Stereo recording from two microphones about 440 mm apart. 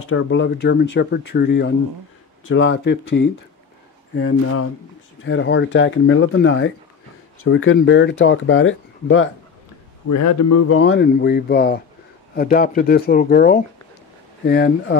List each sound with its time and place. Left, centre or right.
0.0 s speech: left
10.0 s speech: left